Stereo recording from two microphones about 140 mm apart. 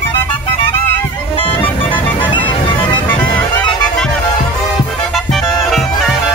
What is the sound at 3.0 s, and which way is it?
Music, 10° left (ahead or behind).